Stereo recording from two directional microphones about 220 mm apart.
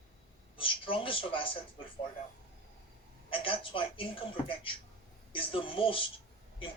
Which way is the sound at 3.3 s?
25° left (ahead or behind).